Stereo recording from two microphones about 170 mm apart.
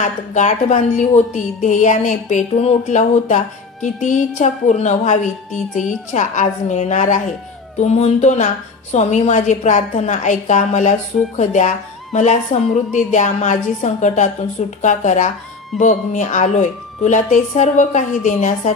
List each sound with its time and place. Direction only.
0.0 s a woman's voice: 45° left (ahead or behind)